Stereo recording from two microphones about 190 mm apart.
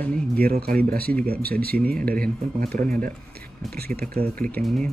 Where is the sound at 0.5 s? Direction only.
55° right (ahead or behind).